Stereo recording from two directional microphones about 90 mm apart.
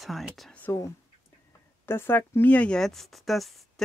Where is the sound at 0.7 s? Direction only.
35° left (ahead or behind).